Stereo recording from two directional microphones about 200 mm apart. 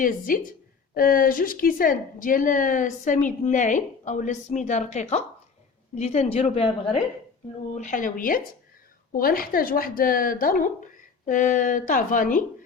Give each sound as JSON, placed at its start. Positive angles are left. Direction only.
{"t": 0.3, "sound": "a woman's voice", "side_deg": 45}
{"t": 7.8, "sound": "a woman's voice", "side_deg": 40}